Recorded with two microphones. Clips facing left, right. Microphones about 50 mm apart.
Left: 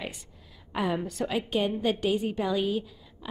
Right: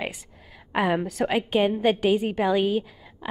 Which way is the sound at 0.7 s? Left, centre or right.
Right.